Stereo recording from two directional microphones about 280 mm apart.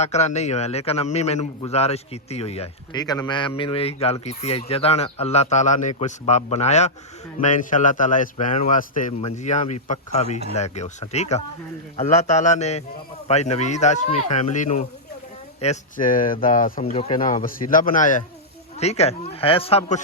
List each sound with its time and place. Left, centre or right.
0.0 s a man's voice: left